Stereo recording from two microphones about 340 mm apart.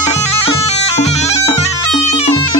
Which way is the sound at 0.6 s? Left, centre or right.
Centre.